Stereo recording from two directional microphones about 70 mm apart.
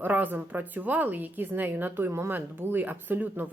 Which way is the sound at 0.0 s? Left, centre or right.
Right.